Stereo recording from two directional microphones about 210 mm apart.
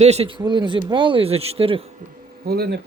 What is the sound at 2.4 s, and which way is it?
Speech, 50° right (ahead or behind).